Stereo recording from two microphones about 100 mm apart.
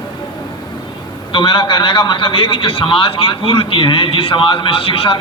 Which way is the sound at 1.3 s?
55° left (ahead or behind).